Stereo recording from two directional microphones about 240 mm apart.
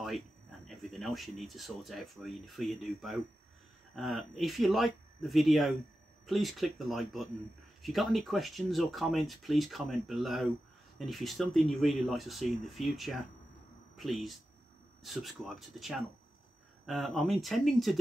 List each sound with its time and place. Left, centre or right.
0.7 s speech: centre